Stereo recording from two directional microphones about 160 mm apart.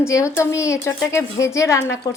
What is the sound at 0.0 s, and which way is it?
A woman's voice, 20° left (ahead or behind).